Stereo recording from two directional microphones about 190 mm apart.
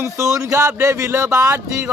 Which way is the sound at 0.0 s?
15° right (ahead or behind).